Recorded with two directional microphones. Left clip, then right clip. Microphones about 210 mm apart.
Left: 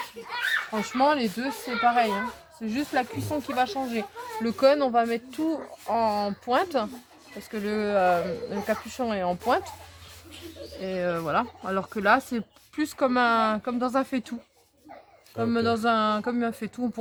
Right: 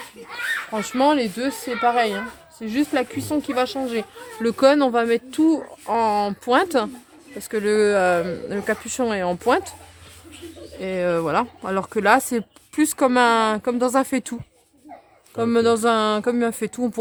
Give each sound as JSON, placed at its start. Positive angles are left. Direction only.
{"t": 0.8, "sound": "speech", "side_deg": -45}
{"t": 10.8, "sound": "speech", "side_deg": -45}
{"t": 15.4, "sound": "speech", "side_deg": -45}